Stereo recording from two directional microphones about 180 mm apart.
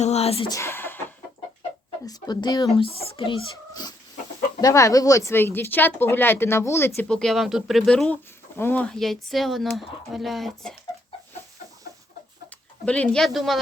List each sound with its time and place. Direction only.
0.0 s a sound: 35° left (ahead or behind)
0.5 s speech: 15° left (ahead or behind)
2.0 s speech: 20° left (ahead or behind); by 10.8 s centre (ahead or behind)
12.8 s speech: 5° left (ahead or behind)